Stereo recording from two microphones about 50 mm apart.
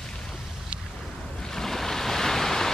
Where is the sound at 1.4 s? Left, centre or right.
Centre.